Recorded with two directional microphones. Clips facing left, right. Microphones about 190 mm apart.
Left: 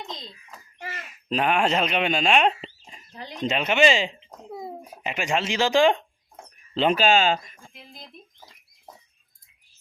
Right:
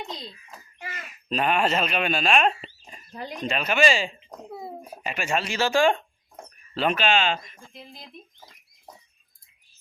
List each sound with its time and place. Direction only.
0.8 s a sound: 35° left (ahead or behind)
1.3 s speech: 15° left (ahead or behind)
6.7 s speech: 30° left (ahead or behind)